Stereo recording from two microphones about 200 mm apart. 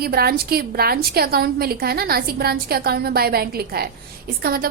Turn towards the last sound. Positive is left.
turn(degrees=-50)  # may be behind; listen again after turning